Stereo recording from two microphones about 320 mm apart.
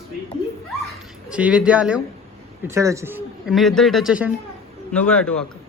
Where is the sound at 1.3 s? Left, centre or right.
Centre.